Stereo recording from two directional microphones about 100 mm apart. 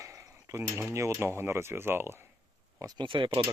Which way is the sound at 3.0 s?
55° right (ahead or behind).